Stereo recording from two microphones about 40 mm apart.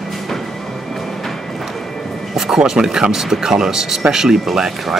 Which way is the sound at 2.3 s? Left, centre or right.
Centre.